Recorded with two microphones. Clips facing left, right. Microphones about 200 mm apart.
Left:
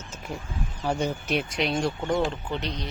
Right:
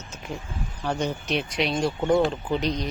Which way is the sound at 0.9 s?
10° left (ahead or behind).